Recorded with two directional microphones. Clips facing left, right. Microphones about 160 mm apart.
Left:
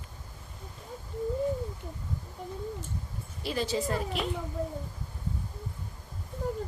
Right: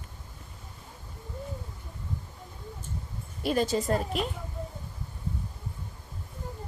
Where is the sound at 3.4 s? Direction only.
50° right (ahead or behind).